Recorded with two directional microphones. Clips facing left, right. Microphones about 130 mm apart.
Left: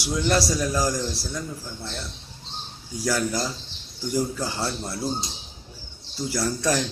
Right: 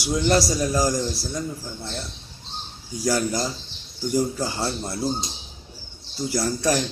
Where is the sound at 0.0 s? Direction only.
20° right (ahead or behind).